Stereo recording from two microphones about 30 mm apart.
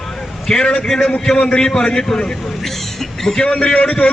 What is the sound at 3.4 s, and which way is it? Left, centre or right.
Speech, left.